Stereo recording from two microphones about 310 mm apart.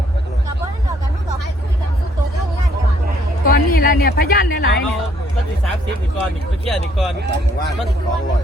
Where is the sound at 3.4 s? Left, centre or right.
Left.